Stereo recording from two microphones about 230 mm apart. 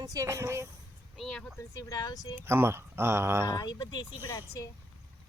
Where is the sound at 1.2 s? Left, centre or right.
Centre.